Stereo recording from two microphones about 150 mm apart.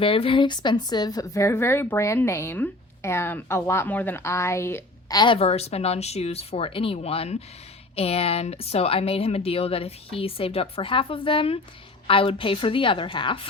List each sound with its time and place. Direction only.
0.0 s a woman's voice: 35° left (ahead or behind); by 5.1 s 15° left (ahead or behind)
5.1 s speech: 35° left (ahead or behind)